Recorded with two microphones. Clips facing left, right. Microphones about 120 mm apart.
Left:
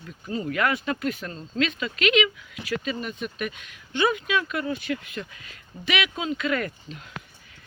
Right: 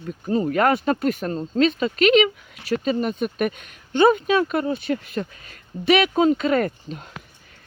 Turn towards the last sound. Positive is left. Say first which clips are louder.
# right 7 dB
turn(degrees=-40)  # may be behind; listen again after turning